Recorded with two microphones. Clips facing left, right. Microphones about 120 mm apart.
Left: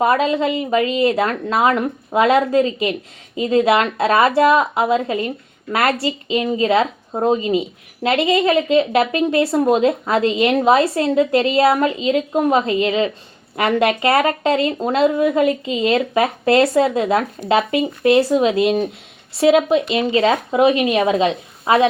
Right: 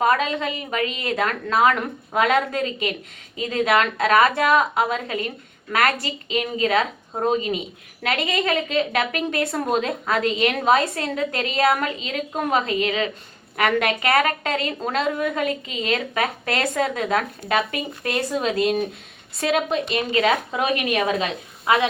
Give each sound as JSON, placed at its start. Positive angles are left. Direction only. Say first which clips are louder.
{"t": 0.0, "sound": "speech", "louder": "left 5 dB", "side_deg": 30}